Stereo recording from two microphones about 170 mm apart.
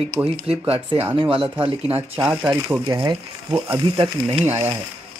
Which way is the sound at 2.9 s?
25° right (ahead or behind).